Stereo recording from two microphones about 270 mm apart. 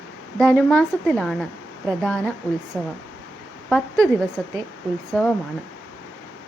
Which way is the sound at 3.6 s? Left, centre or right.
Centre.